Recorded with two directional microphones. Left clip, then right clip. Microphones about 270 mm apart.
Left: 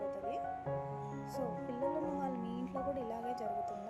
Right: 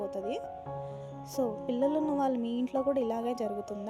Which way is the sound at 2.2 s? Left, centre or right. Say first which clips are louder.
Right 10 dB; right.